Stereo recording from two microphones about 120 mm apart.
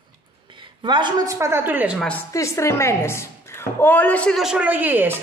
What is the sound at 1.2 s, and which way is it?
Speech, 25° right (ahead or behind).